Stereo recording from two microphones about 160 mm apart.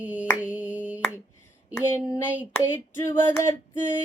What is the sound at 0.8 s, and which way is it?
Finger snapping, 10° right (ahead or behind).